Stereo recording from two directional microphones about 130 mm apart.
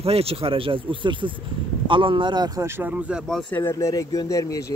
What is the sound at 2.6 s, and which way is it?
Speech, 20° right (ahead or behind).